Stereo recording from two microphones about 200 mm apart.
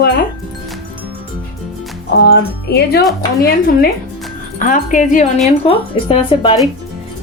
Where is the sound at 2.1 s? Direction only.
60° left (ahead or behind); by 5.2 s 40° left (ahead or behind).